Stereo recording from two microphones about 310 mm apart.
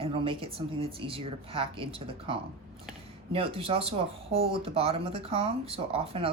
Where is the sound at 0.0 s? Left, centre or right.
Centre.